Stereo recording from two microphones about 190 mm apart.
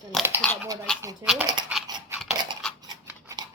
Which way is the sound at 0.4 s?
5° left (ahead or behind).